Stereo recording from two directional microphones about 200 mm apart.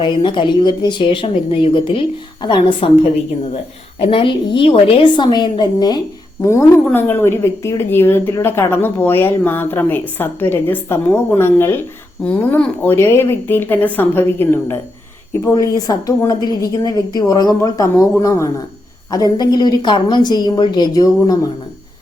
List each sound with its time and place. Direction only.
0.0 s a woman's voice: 25° left (ahead or behind)